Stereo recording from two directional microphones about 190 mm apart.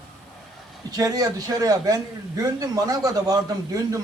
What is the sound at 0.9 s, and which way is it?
A man's voice, 20° right (ahead or behind).